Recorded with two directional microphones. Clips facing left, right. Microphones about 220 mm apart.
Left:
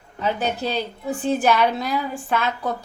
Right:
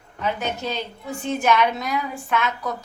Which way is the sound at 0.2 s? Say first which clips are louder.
Left 3 dB; 35° left (ahead or behind).